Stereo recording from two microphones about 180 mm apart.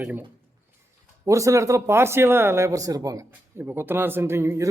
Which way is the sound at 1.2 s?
15° right (ahead or behind).